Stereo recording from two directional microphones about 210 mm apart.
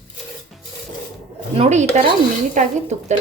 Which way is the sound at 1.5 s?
30° right (ahead or behind).